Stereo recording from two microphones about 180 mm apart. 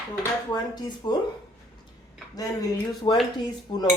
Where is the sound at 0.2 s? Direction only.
20° left (ahead or behind).